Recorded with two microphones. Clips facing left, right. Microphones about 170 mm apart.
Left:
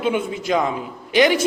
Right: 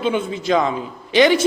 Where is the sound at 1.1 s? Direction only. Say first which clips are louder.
Right 2 dB; 30° right (ahead or behind).